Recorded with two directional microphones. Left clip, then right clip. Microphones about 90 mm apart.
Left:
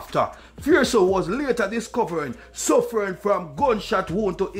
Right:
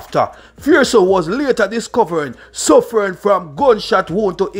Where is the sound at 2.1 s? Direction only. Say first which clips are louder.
Right 8 dB; 40° right (ahead or behind).